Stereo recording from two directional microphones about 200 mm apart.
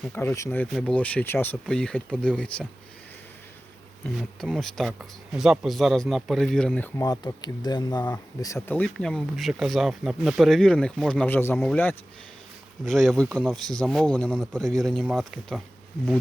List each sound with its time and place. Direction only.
0.0 s speech: 10° left (ahead or behind)
4.0 s speech: centre (ahead or behind)
7.1 s speech: 20° left (ahead or behind); by 15.6 s centre (ahead or behind)